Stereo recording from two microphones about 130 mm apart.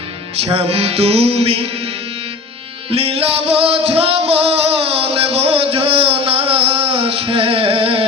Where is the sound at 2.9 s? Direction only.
50° right (ahead or behind).